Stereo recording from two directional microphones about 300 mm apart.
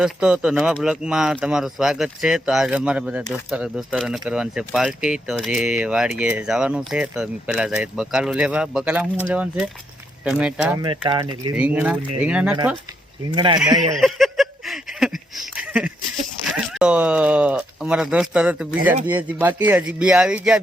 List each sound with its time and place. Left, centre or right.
0.0 s speech: centre
10.8 s speech: centre
11.5 s speech: centre
13.3 s speech: centre
14.0 s a sound: centre
16.5 s speech: centre